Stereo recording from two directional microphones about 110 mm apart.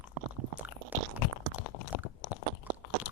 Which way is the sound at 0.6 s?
15° right (ahead or behind).